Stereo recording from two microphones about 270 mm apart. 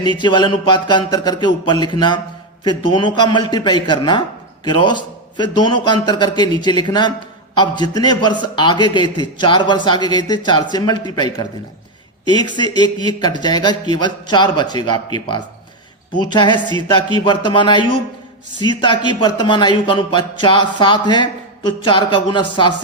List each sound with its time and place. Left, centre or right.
0.0 s a man's voice: centre